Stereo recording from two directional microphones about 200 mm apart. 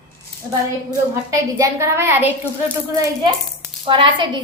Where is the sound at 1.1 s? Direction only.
15° right (ahead or behind).